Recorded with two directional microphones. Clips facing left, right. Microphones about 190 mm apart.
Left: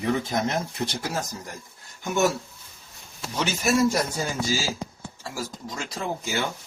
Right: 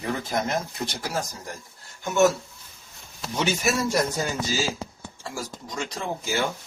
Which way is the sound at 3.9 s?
10° left (ahead or behind).